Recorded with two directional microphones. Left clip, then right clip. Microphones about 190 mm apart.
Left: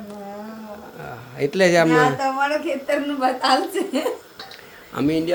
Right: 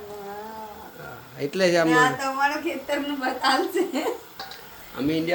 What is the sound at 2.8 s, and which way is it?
A woman's voice, 35° left (ahead or behind).